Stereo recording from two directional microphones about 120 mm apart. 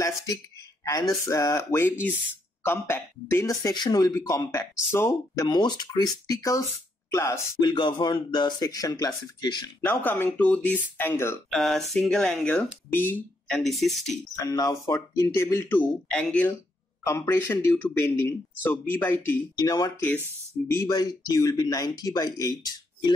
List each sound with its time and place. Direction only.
0.8 s speech: 25° left (ahead or behind)
5.5 s speech: 40° left (ahead or behind)
7.7 s speech: 40° left (ahead or behind)
9.8 s speech: 15° left (ahead or behind)
11.5 s speech: centre (ahead or behind)
12.9 s speech: 15° left (ahead or behind)
13.5 s speech: centre (ahead or behind)
14.4 s speech: 30° left (ahead or behind)
14.9 s speech: 20° left (ahead or behind)
16.1 s speech: 10° left (ahead or behind)
17.0 s speech: 25° left (ahead or behind)
19.6 s speech: 35° left (ahead or behind)
20.6 s speech: 20° left (ahead or behind)